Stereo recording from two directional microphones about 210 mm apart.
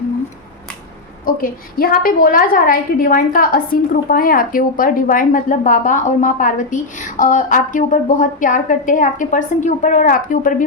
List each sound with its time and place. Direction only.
1.2 s a woman's voice: 45° left (ahead or behind)